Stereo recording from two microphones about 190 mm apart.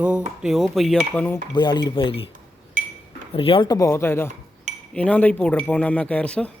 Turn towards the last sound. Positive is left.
turn(degrees=5)  # may be behind; listen again after turning